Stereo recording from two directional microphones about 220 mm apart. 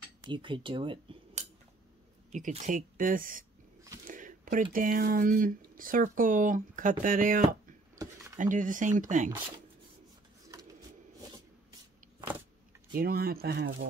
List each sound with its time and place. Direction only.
0.2 s speech: 20° right (ahead or behind)
2.3 s speech: 35° right (ahead or behind)
4.1 s a sound: 35° right (ahead or behind)
4.7 s speech: 40° right (ahead or behind)
12.9 s speech: 40° right (ahead or behind)